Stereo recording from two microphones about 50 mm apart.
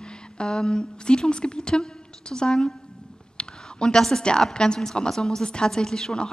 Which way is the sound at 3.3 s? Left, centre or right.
Centre.